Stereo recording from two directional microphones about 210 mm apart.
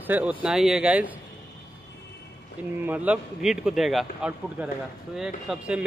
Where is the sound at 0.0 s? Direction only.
5° right (ahead or behind).